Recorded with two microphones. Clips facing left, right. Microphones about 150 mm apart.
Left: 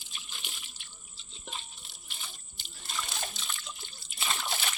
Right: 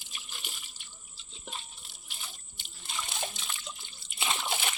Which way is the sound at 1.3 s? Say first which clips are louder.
Even; 5° right (ahead or behind).